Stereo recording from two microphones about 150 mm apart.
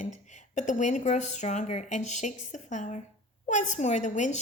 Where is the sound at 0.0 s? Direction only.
55° left (ahead or behind).